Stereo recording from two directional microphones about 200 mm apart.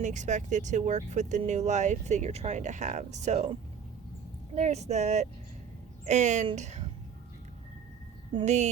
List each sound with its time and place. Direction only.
0.0 s speech: 35° right (ahead or behind)
8.4 s speech: 35° right (ahead or behind)